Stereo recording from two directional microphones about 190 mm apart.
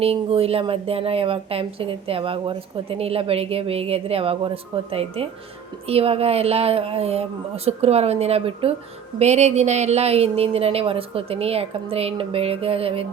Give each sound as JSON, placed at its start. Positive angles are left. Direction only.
{"t": 0.0, "sound": "a woman's voice", "side_deg": -30}